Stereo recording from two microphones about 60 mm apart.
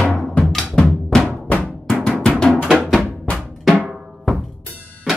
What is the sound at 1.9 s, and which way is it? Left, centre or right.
Drum, centre.